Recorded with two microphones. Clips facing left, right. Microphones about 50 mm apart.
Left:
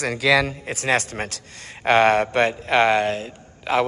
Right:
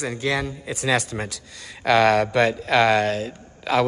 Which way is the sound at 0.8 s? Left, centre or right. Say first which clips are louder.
Left 1 dB; left.